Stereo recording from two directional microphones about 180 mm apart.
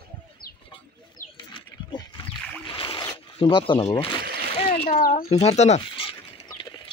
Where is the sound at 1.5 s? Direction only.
25° left (ahead or behind).